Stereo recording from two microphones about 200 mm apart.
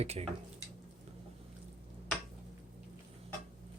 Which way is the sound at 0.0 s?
30° right (ahead or behind).